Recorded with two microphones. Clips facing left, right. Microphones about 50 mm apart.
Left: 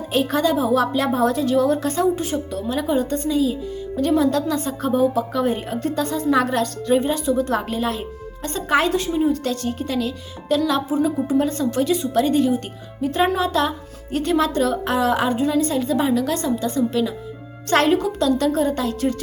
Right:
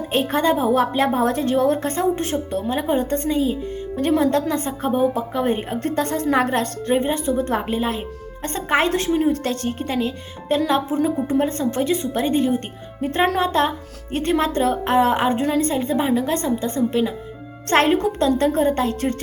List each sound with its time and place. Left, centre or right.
0.1 s speech: right
5.8 s a woman's voice: right
6.3 s speech: right
7.5 s speech: right
8.4 s speech: right
8.9 s speech: right